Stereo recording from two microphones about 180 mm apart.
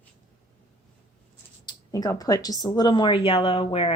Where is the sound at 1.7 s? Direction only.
20° left (ahead or behind).